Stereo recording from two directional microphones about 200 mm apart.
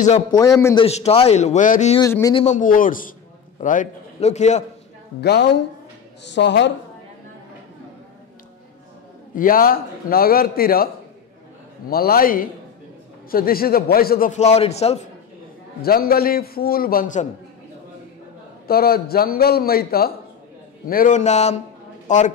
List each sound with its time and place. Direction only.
0.3 s a man's voice: 15° left (ahead or behind)
0.7 s a man's voice: 30° left (ahead or behind)
2.0 s a man's voice: 15° left (ahead or behind)
2.3 s a man's voice: 35° left (ahead or behind)
5.2 s a woman's voice: 55° left (ahead or behind)
9.3 s a man's voice: 45° left (ahead or behind)
11.9 s a man's voice: 50° left (ahead or behind); by 15.0 s 30° left (ahead or behind)
15.8 s a man's voice: 50° left (ahead or behind)
18.7 s a man's voice: 50° left (ahead or behind)